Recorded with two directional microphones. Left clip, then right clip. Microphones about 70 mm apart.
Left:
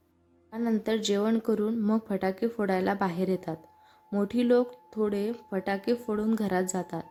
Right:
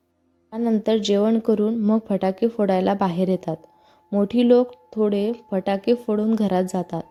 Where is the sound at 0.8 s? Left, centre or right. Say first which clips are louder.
Right 9 dB; right.